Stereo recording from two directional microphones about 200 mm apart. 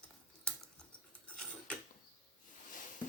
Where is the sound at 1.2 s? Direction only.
5° left (ahead or behind).